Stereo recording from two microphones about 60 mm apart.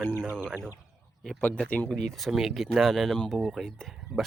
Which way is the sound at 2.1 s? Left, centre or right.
Centre.